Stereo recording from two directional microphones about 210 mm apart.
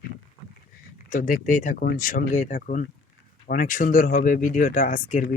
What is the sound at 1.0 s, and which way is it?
Speech, 40° left (ahead or behind).